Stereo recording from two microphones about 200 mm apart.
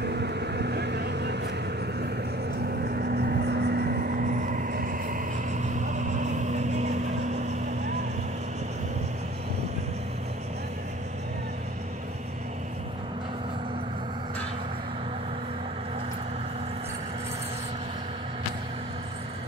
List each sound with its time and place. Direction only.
0.0 s vehicle: 55° right (ahead or behind)
2.8 s vehicle: 50° right (ahead or behind); by 7.5 s 35° right (ahead or behind)